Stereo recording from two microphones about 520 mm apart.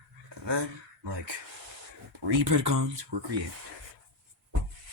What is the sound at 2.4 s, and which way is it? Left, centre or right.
Speech, right.